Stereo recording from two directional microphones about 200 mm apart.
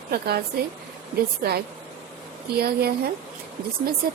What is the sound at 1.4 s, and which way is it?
A woman's voice, 50° right (ahead or behind).